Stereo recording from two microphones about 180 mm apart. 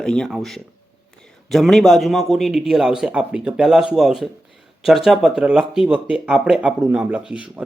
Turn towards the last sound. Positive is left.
turn(degrees=-5)  # may be behind; listen again after turning